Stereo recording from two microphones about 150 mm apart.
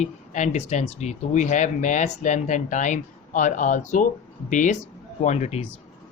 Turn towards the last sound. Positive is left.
turn(degrees=45)  # may be behind; listen again after turning